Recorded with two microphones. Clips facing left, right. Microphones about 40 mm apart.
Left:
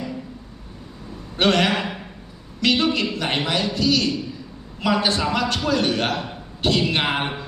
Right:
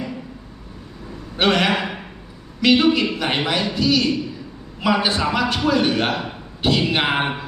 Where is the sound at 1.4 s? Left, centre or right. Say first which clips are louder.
Right 1 dB; centre.